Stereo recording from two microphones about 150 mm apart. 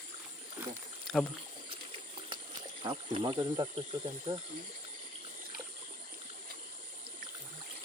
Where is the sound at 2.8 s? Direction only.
35° right (ahead or behind).